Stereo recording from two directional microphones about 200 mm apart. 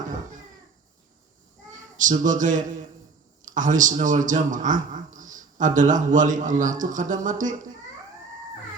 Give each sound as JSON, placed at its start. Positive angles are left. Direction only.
{"t": 2.0, "sound": "a man's voice", "side_deg": -40}